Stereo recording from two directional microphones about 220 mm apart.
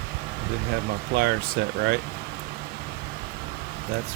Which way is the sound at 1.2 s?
50° right (ahead or behind).